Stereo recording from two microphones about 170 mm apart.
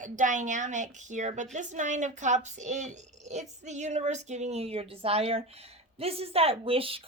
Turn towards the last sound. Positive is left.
turn(degrees=-35)  # may be behind; listen again after turning